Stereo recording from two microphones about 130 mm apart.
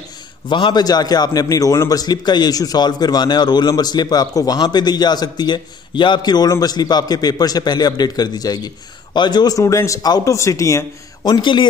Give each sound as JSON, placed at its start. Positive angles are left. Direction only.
{"t": 0.5, "sound": "a man's voice", "side_deg": 40}
{"t": 11.2, "sound": "a man's voice", "side_deg": 35}